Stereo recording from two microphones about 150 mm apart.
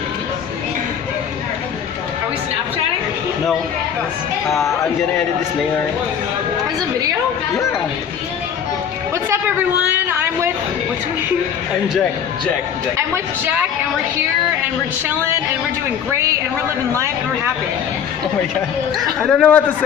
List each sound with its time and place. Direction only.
9.8 s a sound: 15° right (ahead or behind)
12.9 s a man's voice: 15° right (ahead or behind)
18.9 s a man's voice: 5° left (ahead or behind)